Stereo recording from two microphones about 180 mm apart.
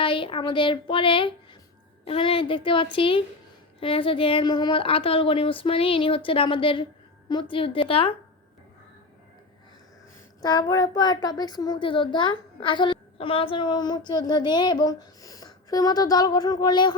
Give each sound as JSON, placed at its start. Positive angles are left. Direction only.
{"t": 0.0, "sound": "a child's voice", "side_deg": 30}
{"t": 10.4, "sound": "a child's voice", "side_deg": 20}